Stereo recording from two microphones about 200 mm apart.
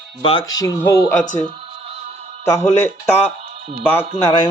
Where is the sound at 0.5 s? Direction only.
15° left (ahead or behind).